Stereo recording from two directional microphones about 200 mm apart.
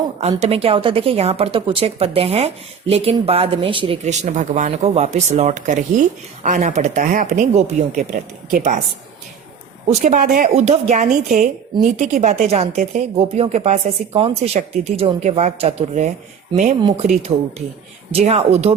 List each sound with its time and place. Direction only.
0.2 s a woman's voice: 30° right (ahead or behind)
9.9 s a woman's voice: 40° right (ahead or behind)
18.1 s a woman's voice: 30° right (ahead or behind)